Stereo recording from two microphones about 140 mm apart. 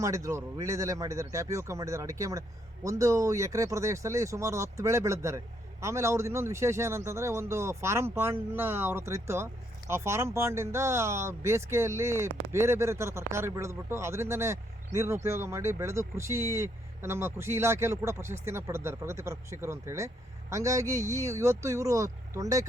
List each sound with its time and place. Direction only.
0.0 s speech: 20° right (ahead or behind)